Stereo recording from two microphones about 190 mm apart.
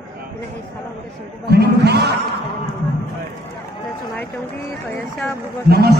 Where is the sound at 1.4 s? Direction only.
55° right (ahead or behind).